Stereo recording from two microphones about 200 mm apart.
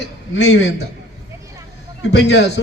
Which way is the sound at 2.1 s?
65° left (ahead or behind).